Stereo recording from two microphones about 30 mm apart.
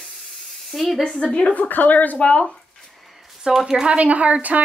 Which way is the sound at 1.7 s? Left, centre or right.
Left.